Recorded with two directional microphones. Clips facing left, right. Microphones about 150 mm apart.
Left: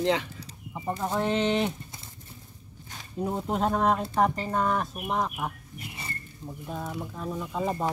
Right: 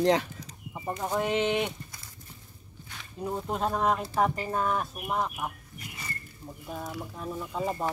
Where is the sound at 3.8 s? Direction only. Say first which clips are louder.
Left 1 dB; centre (ahead or behind).